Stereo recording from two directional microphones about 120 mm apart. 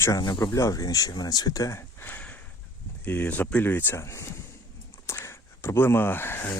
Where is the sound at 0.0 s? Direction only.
30° left (ahead or behind).